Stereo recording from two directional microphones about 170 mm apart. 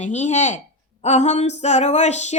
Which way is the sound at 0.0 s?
40° left (ahead or behind).